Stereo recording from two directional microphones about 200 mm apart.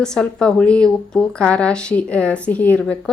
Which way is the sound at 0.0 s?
5° left (ahead or behind).